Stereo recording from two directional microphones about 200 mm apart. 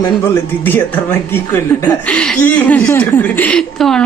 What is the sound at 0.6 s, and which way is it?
A woman's voice, 10° left (ahead or behind).